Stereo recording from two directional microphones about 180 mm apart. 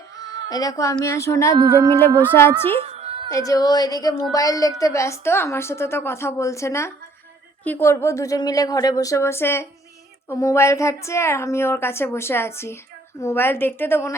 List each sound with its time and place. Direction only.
0.2 s a woman's voice: 20° left (ahead or behind)
2.8 s a sound: 35° right (ahead or behind)
3.2 s a woman's voice: 20° left (ahead or behind)